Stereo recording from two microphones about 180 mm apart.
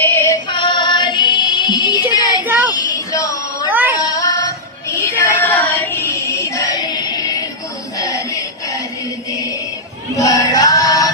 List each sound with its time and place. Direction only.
0.0 s music: 15° left (ahead or behind)
0.4 s music: 25° left (ahead or behind)
2.4 s child singing: 10° right (ahead or behind)
2.7 s a sound: 20° left (ahead or behind)
3.7 s music: 10° right (ahead or behind)
4.0 s child singing: 20° left (ahead or behind)
7.9 s synthetic singing: 20° left (ahead or behind)
10.2 s chant: 20° left (ahead or behind)